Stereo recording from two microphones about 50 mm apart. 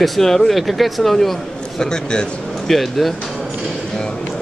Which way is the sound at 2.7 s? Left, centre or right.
Centre.